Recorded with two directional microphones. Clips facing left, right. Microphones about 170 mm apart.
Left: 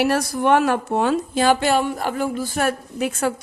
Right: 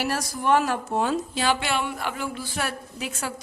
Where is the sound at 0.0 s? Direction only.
65° left (ahead or behind).